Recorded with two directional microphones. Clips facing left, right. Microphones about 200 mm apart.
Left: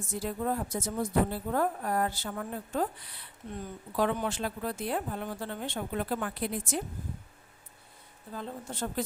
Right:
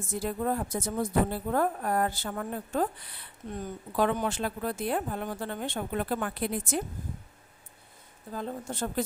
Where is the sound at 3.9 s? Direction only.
55° right (ahead or behind).